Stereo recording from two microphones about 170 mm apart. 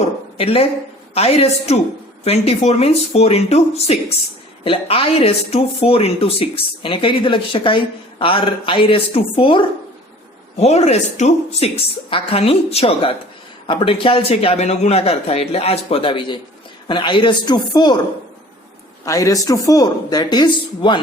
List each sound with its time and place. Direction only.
0.3 s speech: 35° left (ahead or behind)
19.0 s speech: 20° left (ahead or behind)